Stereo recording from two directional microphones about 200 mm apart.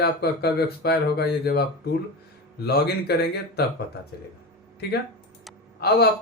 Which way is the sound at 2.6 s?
55° left (ahead or behind).